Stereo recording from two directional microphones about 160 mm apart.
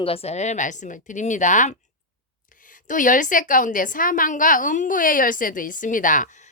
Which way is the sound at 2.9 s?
55° left (ahead or behind).